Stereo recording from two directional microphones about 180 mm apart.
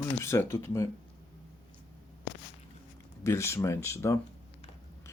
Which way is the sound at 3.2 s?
15° left (ahead or behind).